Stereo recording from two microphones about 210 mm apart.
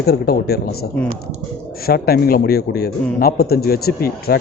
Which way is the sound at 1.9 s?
45° left (ahead or behind).